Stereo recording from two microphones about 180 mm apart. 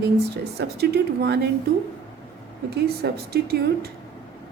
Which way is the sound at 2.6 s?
60° right (ahead or behind).